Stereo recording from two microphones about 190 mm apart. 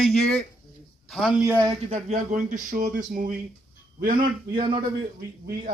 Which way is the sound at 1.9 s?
40° right (ahead or behind).